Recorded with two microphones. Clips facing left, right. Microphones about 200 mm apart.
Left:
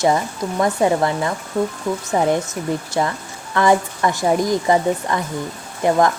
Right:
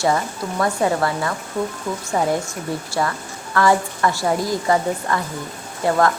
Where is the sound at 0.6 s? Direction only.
20° left (ahead or behind).